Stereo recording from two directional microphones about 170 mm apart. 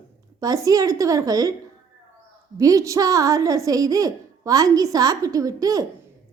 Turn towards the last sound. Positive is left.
turn(degrees=-20)  # may be behind; listen again after turning